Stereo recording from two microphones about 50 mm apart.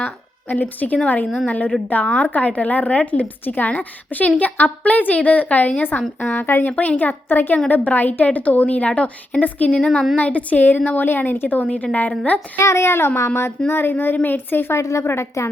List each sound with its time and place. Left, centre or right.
0.0 s a woman's voice: left
9.7 s speech: centre
10.2 s a woman's voice: left
12.6 s a child's voice: left
13.7 s a woman's voice: left
14.8 s a woman's voice: left
15.0 s a child's voice: left